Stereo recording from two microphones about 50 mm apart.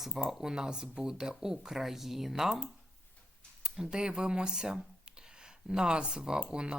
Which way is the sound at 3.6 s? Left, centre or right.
Centre.